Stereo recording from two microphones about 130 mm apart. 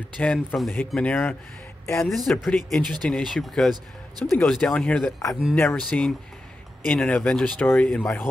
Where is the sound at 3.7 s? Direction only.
30° right (ahead or behind).